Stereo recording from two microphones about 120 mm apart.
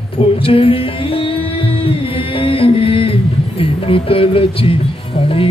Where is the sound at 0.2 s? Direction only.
50° left (ahead or behind).